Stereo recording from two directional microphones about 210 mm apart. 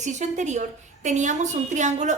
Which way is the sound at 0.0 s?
35° right (ahead or behind).